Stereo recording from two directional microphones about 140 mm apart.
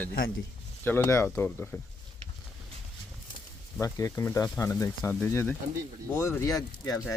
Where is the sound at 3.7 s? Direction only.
20° left (ahead or behind).